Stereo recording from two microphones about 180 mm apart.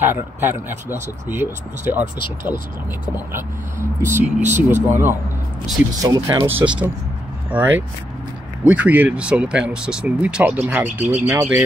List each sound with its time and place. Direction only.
0.0 s speech: 10° right (ahead or behind)
4.0 s speech: 15° right (ahead or behind)
4.4 s speech: 40° right (ahead or behind)
4.6 s speech: 10° right (ahead or behind)